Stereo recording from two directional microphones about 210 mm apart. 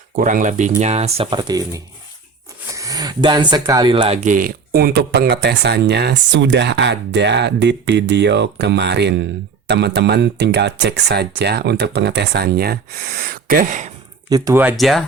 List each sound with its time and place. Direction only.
0.2 s speech: 35° right (ahead or behind)
14.3 s speech: 15° right (ahead or behind); by 15.0 s centre (ahead or behind)